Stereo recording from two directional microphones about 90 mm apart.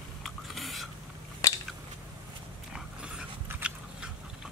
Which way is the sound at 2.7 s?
10° right (ahead or behind).